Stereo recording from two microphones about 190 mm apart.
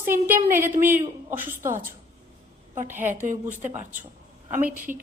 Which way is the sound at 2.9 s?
10° right (ahead or behind).